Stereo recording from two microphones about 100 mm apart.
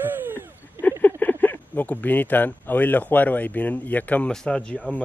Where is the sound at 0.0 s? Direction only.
20° right (ahead or behind).